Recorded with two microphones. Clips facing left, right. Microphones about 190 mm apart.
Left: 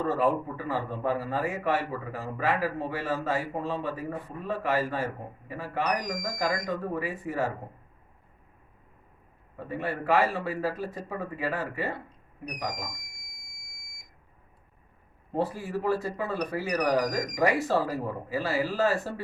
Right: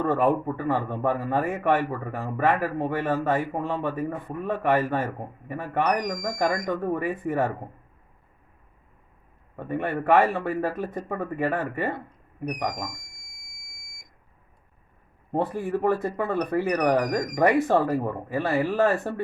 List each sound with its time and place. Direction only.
0.0 s speech: 55° right (ahead or behind)
9.6 s speech: 55° right (ahead or behind)
15.3 s speech: 55° right (ahead or behind)